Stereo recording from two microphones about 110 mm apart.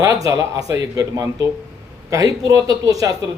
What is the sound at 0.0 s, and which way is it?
A man's voice, 30° right (ahead or behind).